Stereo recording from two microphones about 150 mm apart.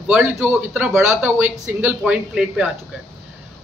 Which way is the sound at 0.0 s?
5° right (ahead or behind).